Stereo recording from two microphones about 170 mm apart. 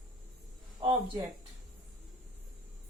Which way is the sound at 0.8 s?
30° right (ahead or behind).